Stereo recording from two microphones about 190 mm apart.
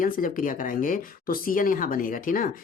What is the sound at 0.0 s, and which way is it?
Speech, 45° left (ahead or behind).